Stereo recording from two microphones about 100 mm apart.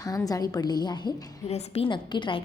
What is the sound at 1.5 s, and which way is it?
Speech, 85° left.